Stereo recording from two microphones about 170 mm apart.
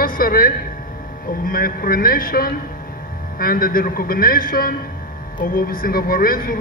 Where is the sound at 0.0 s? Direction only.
55° left (ahead or behind).